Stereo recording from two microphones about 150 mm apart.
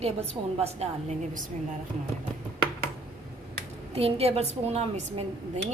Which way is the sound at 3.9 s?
40° right (ahead or behind).